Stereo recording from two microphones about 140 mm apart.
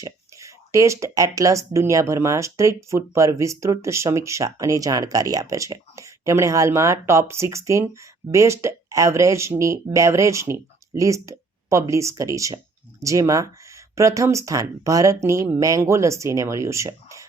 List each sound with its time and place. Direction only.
0.0 s speech: 20° right (ahead or behind)